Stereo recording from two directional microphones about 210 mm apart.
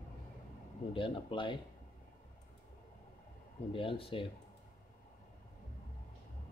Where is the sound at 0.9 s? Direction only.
25° left (ahead or behind).